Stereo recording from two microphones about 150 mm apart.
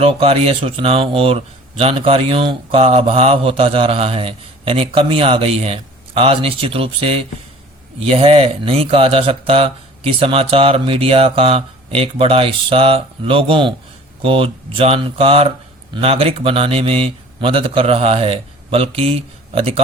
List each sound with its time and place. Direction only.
0.0 s speech: 40° right (ahead or behind)